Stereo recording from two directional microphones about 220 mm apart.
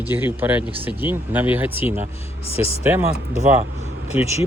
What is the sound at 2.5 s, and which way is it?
Speech, 25° left (ahead or behind).